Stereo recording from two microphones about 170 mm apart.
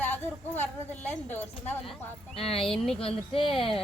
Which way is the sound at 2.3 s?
35° left (ahead or behind).